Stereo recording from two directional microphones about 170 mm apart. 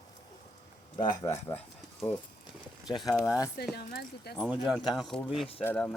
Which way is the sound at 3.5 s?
65° left (ahead or behind).